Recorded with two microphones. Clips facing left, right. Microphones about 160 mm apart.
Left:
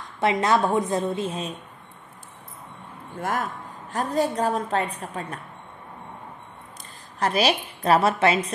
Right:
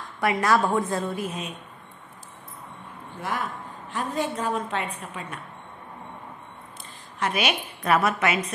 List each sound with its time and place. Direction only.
0.2 s a woman's voice: 20° left (ahead or behind)
3.2 s a man's voice: 45° left (ahead or behind)
7.2 s a woman's voice: 35° left (ahead or behind)